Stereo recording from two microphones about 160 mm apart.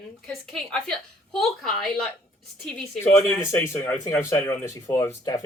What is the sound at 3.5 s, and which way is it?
Speech, 15° left (ahead or behind).